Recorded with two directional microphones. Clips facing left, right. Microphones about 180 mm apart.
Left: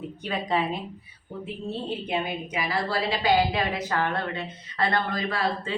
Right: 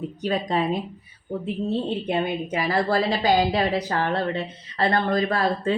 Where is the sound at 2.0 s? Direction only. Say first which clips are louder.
Right 5 dB; 45° right (ahead or behind).